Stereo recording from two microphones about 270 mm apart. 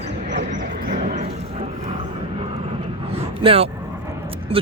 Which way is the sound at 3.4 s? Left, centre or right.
Right.